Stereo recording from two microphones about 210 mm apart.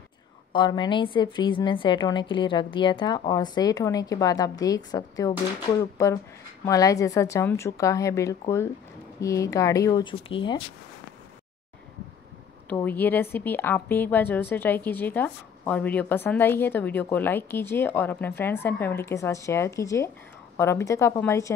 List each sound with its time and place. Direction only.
0.5 s a woman's voice: 20° left (ahead or behind)
12.6 s a woman's voice: 10° left (ahead or behind)